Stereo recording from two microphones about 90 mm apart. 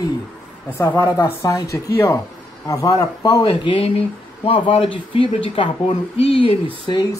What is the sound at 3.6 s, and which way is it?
Speech, 80° left.